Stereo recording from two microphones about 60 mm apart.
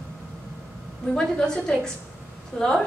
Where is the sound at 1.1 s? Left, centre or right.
Centre.